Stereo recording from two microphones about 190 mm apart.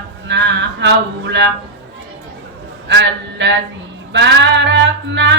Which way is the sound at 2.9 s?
65° right (ahead or behind).